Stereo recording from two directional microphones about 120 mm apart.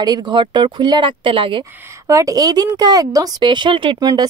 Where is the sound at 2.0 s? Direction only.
30° right (ahead or behind).